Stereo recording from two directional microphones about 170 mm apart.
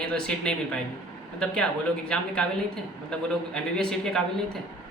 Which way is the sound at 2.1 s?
5° left (ahead or behind).